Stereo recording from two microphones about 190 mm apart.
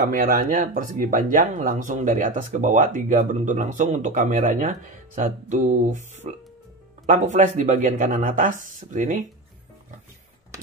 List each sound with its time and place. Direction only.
0.1 s speech: 45° right (ahead or behind)